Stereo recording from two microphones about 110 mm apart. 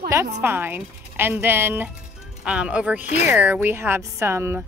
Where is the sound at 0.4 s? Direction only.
20° right (ahead or behind).